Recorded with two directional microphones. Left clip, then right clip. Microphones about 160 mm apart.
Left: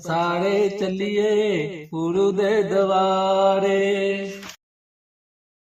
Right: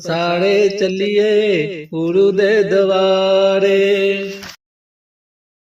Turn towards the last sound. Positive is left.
turn(degrees=-15)  # may be behind; listen again after turning